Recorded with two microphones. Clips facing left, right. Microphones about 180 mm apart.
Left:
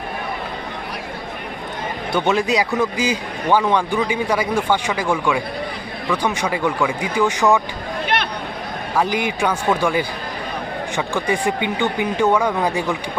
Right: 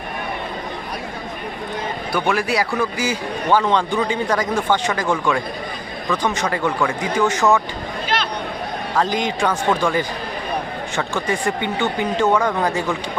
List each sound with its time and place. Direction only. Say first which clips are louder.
2.1 s a man's voice: left 2 dB; 20° left (ahead or behind)
8.0 s a sound: left 1 dB; 60° left (ahead or behind)
9.0 s a man's voice: even; 10° left (ahead or behind)